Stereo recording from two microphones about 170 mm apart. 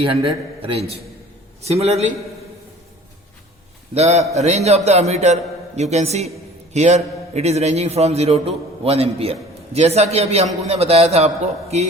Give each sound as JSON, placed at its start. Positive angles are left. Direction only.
{"t": 0.0, "sound": "a man's voice", "side_deg": -30}
{"t": 3.9, "sound": "a man's voice", "side_deg": -40}